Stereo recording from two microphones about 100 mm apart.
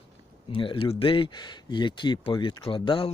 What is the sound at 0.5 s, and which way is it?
Speech, 60° left (ahead or behind).